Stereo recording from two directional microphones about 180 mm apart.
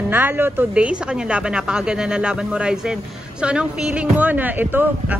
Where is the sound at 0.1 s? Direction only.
10° right (ahead or behind).